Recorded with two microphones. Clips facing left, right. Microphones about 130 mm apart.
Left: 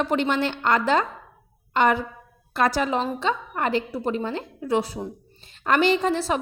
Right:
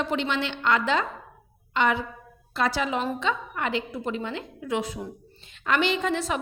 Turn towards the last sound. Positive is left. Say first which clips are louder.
# left 4 dB
turn(degrees=35)  # may be behind; listen again after turning